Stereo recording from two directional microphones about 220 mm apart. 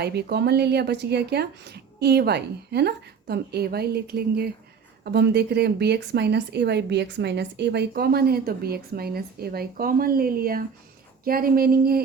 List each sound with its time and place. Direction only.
0.0 s speech: 50° right (ahead or behind)